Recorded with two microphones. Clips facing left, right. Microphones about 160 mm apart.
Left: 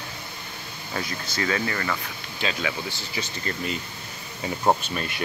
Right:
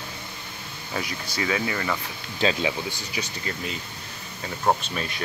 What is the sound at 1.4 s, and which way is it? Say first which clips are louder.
Speech: even; 10° right (ahead or behind).